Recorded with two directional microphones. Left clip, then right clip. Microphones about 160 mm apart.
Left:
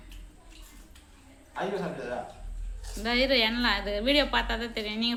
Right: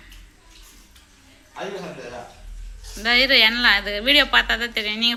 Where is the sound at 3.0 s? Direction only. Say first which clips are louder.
Right 9 dB; centre (ahead or behind).